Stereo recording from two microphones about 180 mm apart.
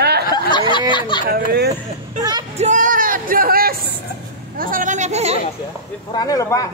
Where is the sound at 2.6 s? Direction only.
40° right (ahead or behind).